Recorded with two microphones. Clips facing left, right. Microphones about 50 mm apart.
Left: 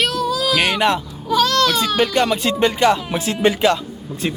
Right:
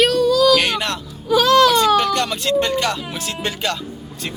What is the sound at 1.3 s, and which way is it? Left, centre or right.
Speech, centre.